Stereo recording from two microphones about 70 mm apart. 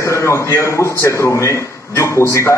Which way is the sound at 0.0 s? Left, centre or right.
Left.